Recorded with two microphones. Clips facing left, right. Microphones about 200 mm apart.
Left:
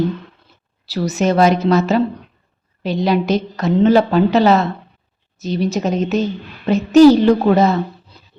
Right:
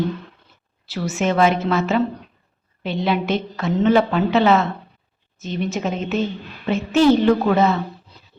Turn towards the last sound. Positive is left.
turn(degrees=40)  # may be behind; listen again after turning